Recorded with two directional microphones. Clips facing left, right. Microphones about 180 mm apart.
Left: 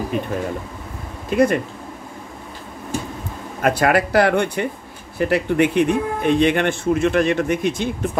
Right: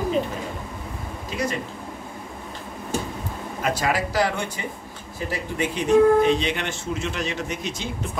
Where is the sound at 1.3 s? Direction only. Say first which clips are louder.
Left 11 dB; 55° left (ahead or behind).